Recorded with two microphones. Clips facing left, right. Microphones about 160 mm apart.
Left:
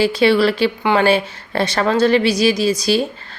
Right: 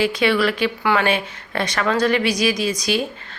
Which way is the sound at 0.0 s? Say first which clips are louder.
Left 4 dB; 30° left (ahead or behind).